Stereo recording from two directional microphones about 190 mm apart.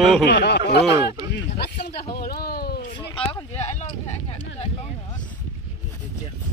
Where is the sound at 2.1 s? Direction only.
55° left (ahead or behind).